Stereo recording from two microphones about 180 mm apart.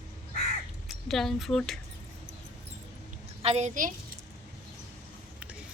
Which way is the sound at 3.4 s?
35° right (ahead or behind).